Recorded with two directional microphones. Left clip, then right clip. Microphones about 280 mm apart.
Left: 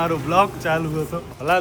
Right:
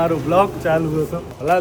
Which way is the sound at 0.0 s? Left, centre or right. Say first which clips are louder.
Right 2 dB; centre.